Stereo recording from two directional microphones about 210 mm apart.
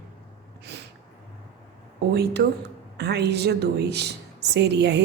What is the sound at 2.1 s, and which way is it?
A woman's voice, 50° right (ahead or behind).